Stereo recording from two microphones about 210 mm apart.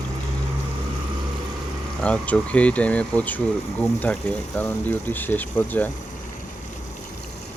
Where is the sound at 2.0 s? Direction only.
5° left (ahead or behind).